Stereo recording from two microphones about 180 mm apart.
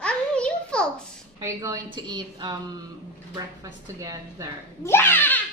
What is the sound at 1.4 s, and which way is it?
A woman's voice, 20° right (ahead or behind).